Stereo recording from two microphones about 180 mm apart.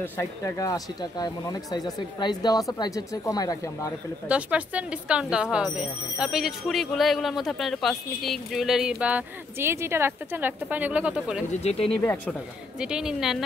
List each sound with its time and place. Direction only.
0.0 s speech: 15° left (ahead or behind)
4.3 s speech: 5° right (ahead or behind)